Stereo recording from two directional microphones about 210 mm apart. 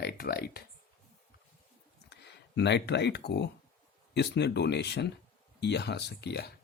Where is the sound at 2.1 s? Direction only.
55° left (ahead or behind).